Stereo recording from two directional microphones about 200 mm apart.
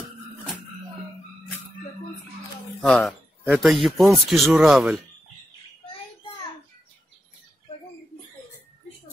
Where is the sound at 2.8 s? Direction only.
5° left (ahead or behind).